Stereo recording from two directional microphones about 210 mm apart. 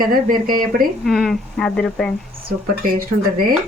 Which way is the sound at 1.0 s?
Centre (ahead or behind).